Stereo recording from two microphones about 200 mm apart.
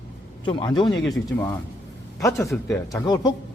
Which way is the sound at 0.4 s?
25° left (ahead or behind).